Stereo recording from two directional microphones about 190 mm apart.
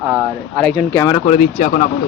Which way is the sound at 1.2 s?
40° left (ahead or behind).